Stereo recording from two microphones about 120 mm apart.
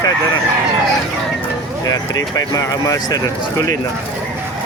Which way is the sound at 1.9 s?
30° left (ahead or behind).